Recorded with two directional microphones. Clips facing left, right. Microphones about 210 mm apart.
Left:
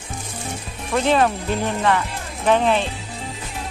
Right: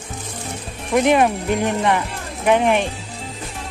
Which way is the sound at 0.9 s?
15° right (ahead or behind).